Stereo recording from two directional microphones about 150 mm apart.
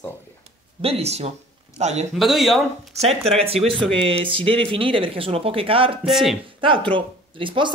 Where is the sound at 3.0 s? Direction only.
45° right (ahead or behind).